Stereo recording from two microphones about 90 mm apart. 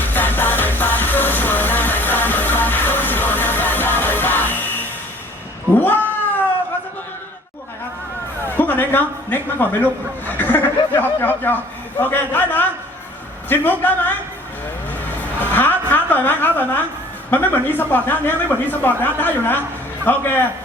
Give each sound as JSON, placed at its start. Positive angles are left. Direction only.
{"t": 0.0, "sound": "music", "side_deg": 20}
{"t": 5.7, "sound": "cat", "side_deg": 20}
{"t": 8.4, "sound": "a sound", "side_deg": 20}
{"t": 11.4, "sound": "speech", "side_deg": 20}
{"t": 14.9, "sound": "a sound", "side_deg": 20}
{"t": 17.3, "sound": "speech", "side_deg": 20}